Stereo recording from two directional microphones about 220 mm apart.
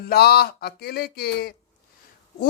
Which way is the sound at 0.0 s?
45° left (ahead or behind).